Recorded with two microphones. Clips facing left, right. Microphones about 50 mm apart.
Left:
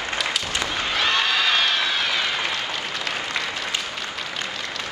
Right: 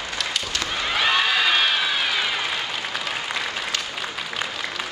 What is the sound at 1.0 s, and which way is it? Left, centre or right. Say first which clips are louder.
Crowd: right 1 dB; centre.